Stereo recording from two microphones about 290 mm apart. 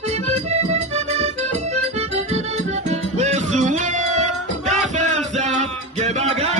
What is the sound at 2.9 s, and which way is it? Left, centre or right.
Music, right.